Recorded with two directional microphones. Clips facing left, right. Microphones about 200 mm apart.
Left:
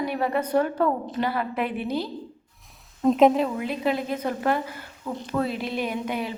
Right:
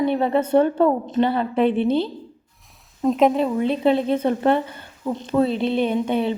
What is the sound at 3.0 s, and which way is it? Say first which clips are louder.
Speech: right 1 dB; centre (ahead or behind).